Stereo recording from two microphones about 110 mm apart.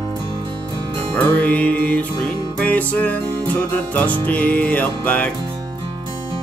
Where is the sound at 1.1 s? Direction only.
15° left (ahead or behind).